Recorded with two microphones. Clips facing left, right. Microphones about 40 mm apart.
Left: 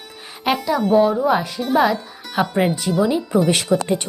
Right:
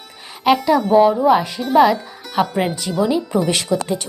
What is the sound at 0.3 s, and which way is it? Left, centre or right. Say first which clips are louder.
Speech: right 5 dB; centre.